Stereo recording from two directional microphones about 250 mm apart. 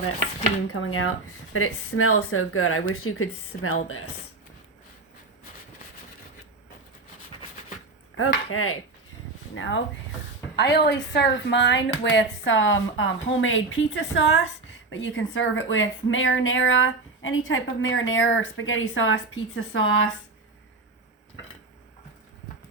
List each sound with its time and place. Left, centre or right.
0.7 s speech: left
8.4 s speech: left
9.6 s a woman's voice: left